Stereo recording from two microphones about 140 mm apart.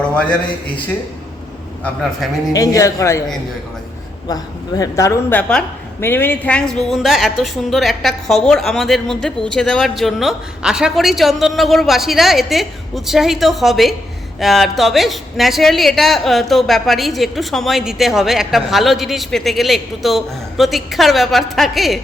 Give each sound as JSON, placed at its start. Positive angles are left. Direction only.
{"t": 2.5, "sound": "a woman's voice", "side_deg": 25}
{"t": 4.3, "sound": "a woman's voice", "side_deg": 25}
{"t": 5.3, "sound": "a woman's voice", "side_deg": 5}